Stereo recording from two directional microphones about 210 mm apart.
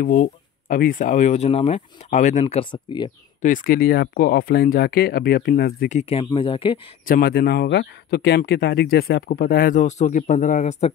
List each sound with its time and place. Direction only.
0.0 s speech: 40° left (ahead or behind)
2.4 s speech: 25° left (ahead or behind)
3.4 s speech: 40° left (ahead or behind)
5.9 s speech: 25° left (ahead or behind)
7.1 s speech: 45° left (ahead or behind)